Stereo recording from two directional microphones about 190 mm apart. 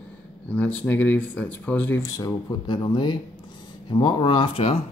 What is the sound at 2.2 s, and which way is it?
Speech, 25° left (ahead or behind).